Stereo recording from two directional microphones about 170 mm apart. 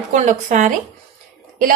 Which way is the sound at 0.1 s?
45° right (ahead or behind).